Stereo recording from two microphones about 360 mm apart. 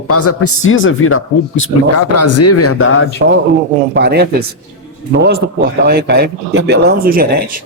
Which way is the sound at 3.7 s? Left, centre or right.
Right.